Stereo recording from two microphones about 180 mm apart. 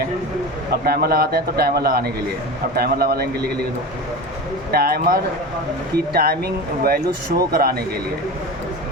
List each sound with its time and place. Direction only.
0.9 s speech: 60° right (ahead or behind)
4.7 s speech: 55° right (ahead or behind)